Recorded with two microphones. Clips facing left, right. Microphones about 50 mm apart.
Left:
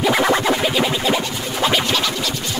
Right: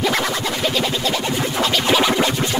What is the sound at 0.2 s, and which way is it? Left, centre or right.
Music, left.